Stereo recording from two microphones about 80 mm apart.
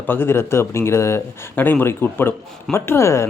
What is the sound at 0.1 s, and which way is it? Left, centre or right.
Speech, left.